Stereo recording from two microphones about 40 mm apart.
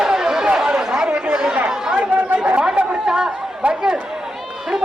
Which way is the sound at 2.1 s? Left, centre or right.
Right.